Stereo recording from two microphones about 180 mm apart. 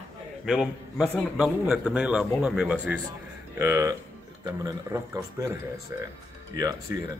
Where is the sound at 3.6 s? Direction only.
15° right (ahead or behind).